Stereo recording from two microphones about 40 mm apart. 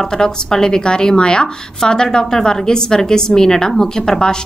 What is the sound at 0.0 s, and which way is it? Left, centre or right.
A woman's voice, centre.